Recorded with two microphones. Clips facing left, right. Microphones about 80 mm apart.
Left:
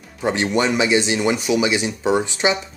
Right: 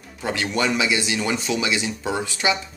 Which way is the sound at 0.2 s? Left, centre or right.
Left.